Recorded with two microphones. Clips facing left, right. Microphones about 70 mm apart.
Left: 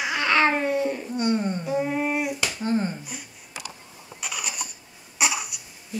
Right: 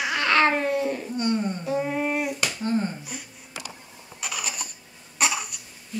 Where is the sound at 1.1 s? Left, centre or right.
Centre.